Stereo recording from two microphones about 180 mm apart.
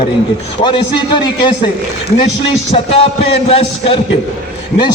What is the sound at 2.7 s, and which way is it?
A man's voice, 30° left (ahead or behind).